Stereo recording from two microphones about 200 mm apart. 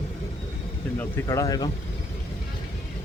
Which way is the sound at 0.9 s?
10° left (ahead or behind).